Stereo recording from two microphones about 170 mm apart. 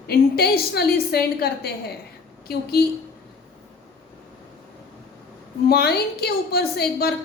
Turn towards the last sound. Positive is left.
turn(degrees=65)  # may be behind; listen again after turning